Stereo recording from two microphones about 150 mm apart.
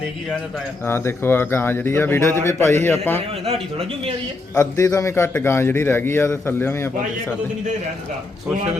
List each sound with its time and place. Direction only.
0.9 s a man's voice: 15° left (ahead or behind)
3.4 s a man's voice: 40° right (ahead or behind)
4.5 s a man's voice: 25° left (ahead or behind)